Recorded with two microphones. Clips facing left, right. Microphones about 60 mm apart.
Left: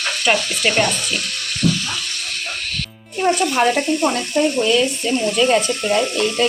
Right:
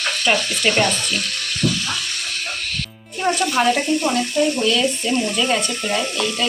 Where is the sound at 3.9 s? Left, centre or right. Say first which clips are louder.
Even; left.